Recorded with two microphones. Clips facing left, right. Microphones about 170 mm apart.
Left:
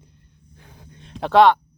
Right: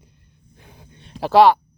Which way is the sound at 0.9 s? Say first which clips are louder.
Right 1 dB; centre (ahead or behind).